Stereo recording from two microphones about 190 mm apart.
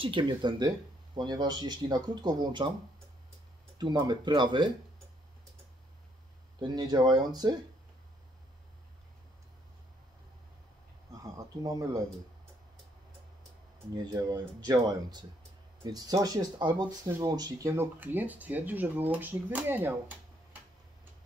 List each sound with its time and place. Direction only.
0.0 s speech: 25° right (ahead or behind)
3.7 s speech: 25° right (ahead or behind)
6.6 s speech: 20° right (ahead or behind)
11.3 s speech: 15° right (ahead or behind)
14.1 s speech: 20° right (ahead or behind)